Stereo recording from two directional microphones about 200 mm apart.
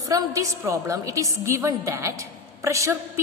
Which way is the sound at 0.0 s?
15° right (ahead or behind).